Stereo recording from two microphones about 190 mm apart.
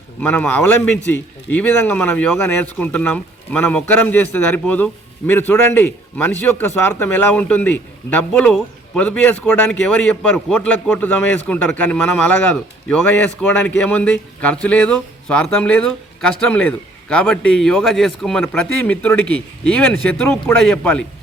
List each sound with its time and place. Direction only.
0.2 s speech: 10° left (ahead or behind)